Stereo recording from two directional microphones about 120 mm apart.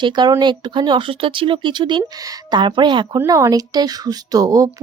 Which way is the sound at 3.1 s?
30° right (ahead or behind).